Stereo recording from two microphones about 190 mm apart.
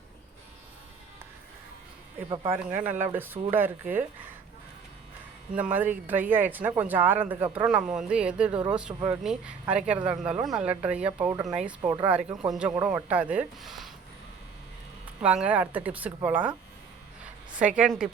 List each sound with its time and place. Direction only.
2.3 s speech: 20° right (ahead or behind)
2.6 s speech: 10° right (ahead or behind)
5.5 s speech: 10° right (ahead or behind)
15.2 s speech: 5° right (ahead or behind)
17.6 s speech: 5° right (ahead or behind)